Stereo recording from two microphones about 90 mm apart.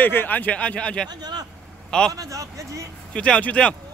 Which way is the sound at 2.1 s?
35° right (ahead or behind).